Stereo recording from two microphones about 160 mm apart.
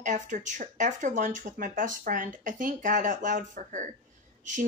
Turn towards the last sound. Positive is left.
turn(degrees=-50)  # may be behind; listen again after turning